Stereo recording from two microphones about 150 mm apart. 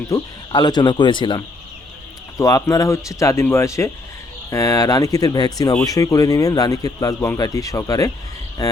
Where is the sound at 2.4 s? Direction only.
20° left (ahead or behind).